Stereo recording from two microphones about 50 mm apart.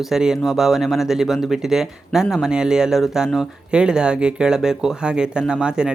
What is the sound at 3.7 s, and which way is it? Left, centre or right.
Speech, centre.